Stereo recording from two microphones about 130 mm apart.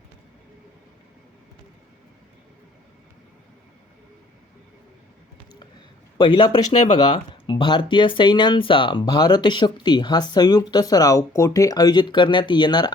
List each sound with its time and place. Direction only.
6.1 s speech: 35° left (ahead or behind)